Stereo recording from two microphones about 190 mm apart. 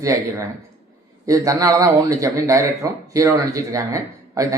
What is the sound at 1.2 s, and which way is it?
Speech, 15° right (ahead or behind).